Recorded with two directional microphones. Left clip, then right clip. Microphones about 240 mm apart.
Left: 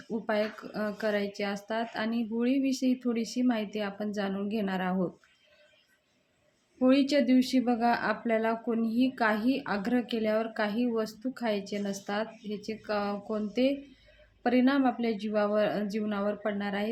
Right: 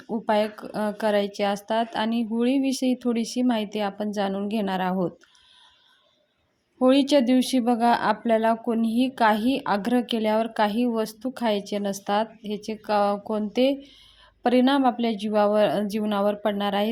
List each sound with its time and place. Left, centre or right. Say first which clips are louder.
0.3 s speech: right 7 dB; right
6.7 s speech: right 6 dB; right